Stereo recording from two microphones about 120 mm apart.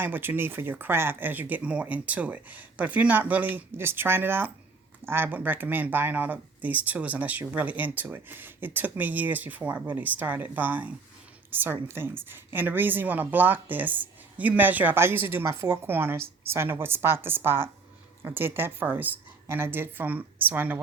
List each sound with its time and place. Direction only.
0.0 s speech: 15° right (ahead or behind)